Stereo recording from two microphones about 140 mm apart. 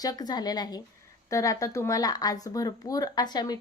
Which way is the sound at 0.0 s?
25° left (ahead or behind).